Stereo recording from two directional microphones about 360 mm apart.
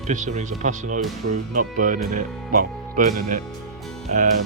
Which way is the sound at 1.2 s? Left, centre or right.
Right.